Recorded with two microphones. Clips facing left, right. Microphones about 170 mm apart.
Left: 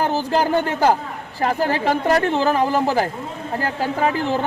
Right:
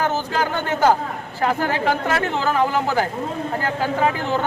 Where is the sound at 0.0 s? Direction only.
35° left (ahead or behind).